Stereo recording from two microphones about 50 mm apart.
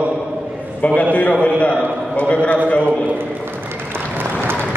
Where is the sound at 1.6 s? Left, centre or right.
Left.